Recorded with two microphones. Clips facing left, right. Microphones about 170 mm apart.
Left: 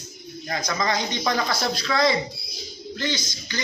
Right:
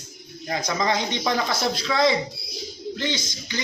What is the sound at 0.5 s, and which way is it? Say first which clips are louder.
Speech: right 1 dB; 25° right (ahead or behind).